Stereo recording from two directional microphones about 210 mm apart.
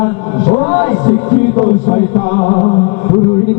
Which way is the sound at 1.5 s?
30° left (ahead or behind).